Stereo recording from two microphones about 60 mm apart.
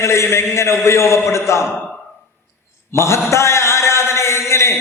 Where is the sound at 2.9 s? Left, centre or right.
Left.